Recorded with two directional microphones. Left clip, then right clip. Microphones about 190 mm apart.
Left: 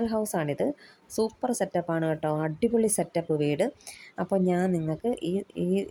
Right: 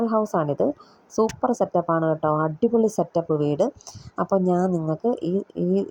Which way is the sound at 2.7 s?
20° left (ahead or behind).